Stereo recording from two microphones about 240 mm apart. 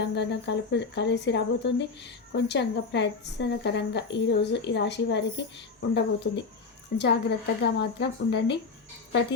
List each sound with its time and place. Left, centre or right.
0.0 s speech: left